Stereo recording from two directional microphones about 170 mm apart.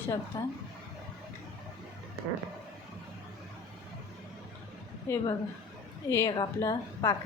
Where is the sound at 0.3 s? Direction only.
20° left (ahead or behind).